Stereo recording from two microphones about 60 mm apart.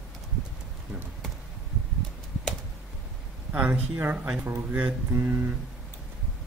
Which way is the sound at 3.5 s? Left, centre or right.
Right.